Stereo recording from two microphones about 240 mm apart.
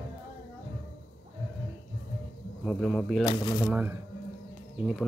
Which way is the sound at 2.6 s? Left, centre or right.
Centre.